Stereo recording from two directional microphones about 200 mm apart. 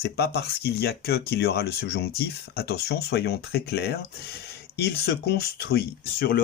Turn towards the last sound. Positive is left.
turn(degrees=50)  # may be behind; listen again after turning